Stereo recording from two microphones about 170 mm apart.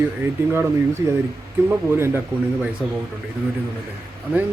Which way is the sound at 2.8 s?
Centre (ahead or behind).